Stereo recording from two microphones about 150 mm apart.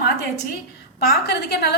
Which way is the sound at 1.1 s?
90° left.